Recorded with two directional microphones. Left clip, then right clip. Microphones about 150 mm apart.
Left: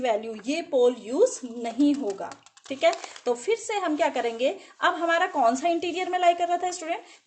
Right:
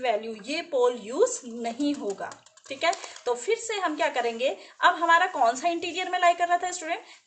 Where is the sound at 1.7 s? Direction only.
45° left (ahead or behind).